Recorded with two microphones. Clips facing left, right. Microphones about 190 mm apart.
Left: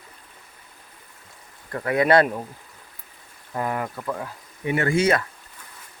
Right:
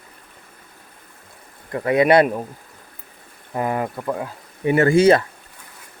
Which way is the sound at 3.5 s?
20° right (ahead or behind).